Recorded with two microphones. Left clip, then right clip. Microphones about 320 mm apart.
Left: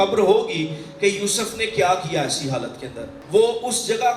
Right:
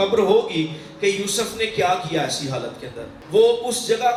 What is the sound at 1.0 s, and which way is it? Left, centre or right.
Speech, left.